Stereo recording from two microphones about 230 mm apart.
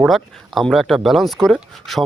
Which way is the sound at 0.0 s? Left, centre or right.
Centre.